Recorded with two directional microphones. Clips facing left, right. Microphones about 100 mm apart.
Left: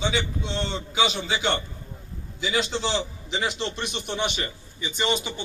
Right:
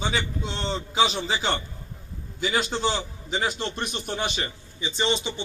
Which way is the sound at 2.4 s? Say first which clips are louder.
Right 1 dB; 50° right (ahead or behind).